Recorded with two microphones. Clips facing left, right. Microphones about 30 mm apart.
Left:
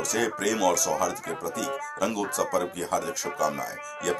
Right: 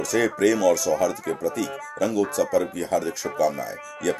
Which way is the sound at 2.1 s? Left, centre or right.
Centre.